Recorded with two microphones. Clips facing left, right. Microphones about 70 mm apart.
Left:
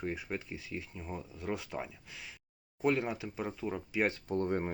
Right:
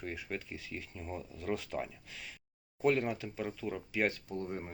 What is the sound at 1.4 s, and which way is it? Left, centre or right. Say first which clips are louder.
Speech: right 2 dB; centre.